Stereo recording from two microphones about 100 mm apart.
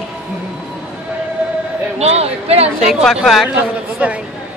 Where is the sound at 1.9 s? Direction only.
90° right.